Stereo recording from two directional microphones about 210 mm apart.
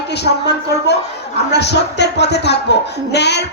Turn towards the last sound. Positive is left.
turn(degrees=55)  # may be behind; listen again after turning